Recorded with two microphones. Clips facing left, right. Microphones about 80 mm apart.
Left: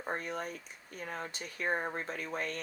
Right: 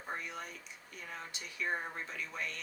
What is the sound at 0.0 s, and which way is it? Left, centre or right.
Speech, left.